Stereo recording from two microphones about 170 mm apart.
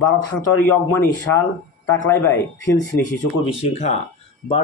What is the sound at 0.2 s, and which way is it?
Speech, 15° left (ahead or behind).